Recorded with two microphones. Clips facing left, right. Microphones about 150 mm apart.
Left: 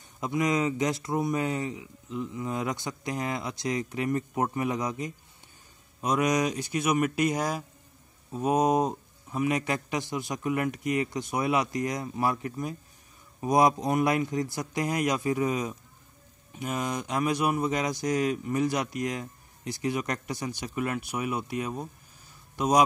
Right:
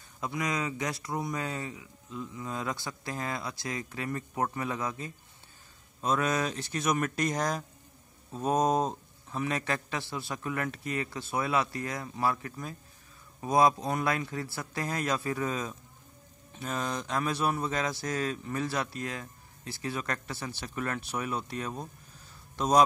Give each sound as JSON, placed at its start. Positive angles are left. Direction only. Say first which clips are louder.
{"t": 0.2, "sound": "speech", "louder": "left 6 dB", "side_deg": 20}